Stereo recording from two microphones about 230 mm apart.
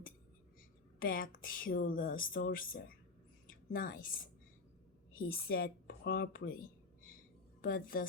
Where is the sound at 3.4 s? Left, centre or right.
Left.